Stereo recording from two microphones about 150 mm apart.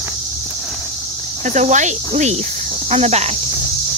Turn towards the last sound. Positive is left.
turn(degrees=-45)  # may be behind; listen again after turning